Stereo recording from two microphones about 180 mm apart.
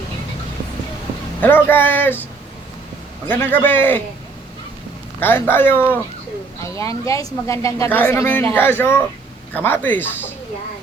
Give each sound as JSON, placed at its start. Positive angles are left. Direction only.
{"t": 1.4, "sound": "speech", "side_deg": 10}
{"t": 3.2, "sound": "speech", "side_deg": 10}
{"t": 5.2, "sound": "speech", "side_deg": 10}